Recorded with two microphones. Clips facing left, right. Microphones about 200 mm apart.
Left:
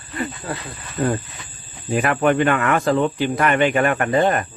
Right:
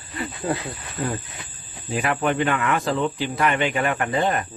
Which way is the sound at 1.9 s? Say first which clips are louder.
Left 5 dB; 60° left (ahead or behind).